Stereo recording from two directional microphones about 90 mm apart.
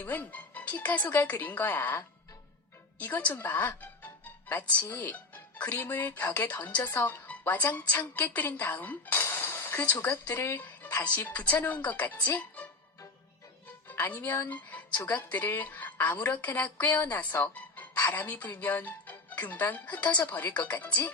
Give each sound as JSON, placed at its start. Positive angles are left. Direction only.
{"t": 0.0, "sound": "a woman's voice", "side_deg": 20}
{"t": 3.3, "sound": "music", "side_deg": 20}
{"t": 4.8, "sound": "a woman's voice", "side_deg": 20}
{"t": 9.1, "sound": "a woman's voice", "side_deg": 30}
{"t": 14.0, "sound": "a woman's voice", "side_deg": 20}